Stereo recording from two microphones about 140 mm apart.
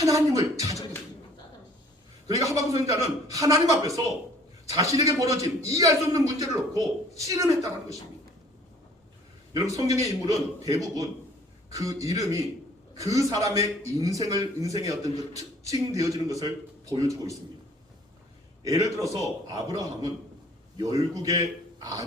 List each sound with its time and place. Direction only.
0.0 s a man's voice: 25° right (ahead or behind)
2.3 s a man's voice: 25° right (ahead or behind)
9.5 s a man's voice: 25° right (ahead or behind)
11.7 s a man's voice: 25° right (ahead or behind)
18.6 s a man's voice: 25° right (ahead or behind)